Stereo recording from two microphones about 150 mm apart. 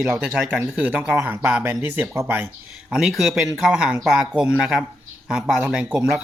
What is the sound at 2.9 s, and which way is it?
Speech, centre (ahead or behind).